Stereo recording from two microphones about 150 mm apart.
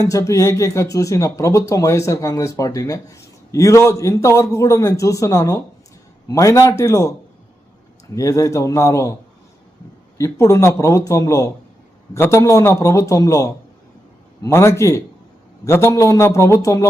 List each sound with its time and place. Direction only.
0.0 s speech: 20° left (ahead or behind)
8.1 s speech: 20° left (ahead or behind)
10.2 s speech: 20° left (ahead or behind)